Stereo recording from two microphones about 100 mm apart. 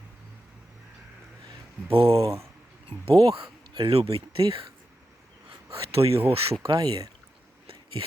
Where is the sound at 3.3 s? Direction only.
65° right (ahead or behind).